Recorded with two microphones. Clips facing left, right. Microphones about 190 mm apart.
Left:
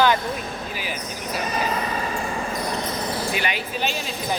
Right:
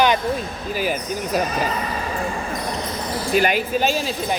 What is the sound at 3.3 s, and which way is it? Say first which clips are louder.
Speech: right 8 dB; 45° right (ahead or behind).